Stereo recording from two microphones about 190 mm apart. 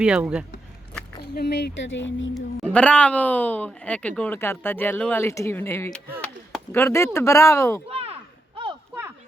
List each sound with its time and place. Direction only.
0.0 s speech: 5° right (ahead or behind)
1.2 s speech: 60° left (ahead or behind); by 2.3 s 75° left (ahead or behind)
2.3 s speech: 5° left (ahead or behind)
7.9 s a sound: 30° right (ahead or behind)